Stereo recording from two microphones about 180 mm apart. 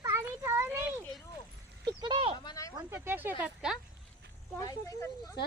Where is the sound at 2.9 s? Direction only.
10° right (ahead or behind).